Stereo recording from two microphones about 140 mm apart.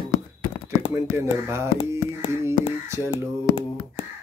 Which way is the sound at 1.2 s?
20° right (ahead or behind).